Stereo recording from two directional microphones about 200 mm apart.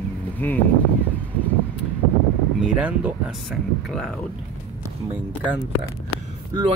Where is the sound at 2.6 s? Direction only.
5° right (ahead or behind).